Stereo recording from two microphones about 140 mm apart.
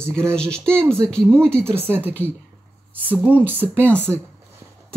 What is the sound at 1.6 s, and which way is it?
Speech, 15° right (ahead or behind).